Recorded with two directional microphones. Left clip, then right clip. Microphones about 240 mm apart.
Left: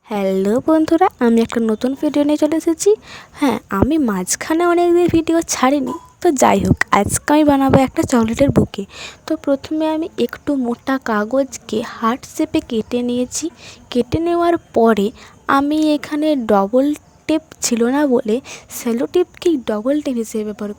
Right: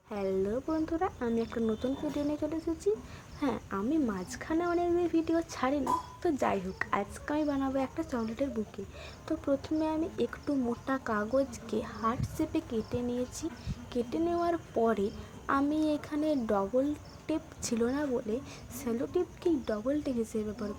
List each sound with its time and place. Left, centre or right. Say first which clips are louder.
0.1 s a woman's voice: left 15 dB; left